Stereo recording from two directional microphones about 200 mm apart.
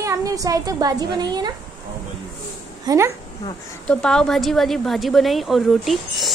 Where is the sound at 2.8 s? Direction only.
15° right (ahead or behind).